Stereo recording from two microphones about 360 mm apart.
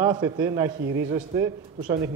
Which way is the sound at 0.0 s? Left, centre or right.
Centre.